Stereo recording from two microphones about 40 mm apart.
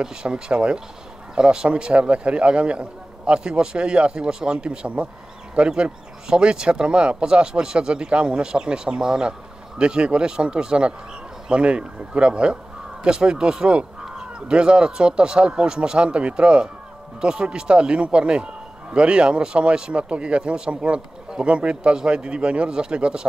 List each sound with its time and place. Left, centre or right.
0.0 s a man's voice: right